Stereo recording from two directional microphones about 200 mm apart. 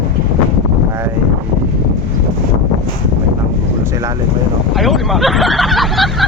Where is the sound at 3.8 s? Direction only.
15° right (ahead or behind).